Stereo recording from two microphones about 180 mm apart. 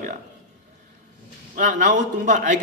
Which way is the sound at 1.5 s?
45° right (ahead or behind).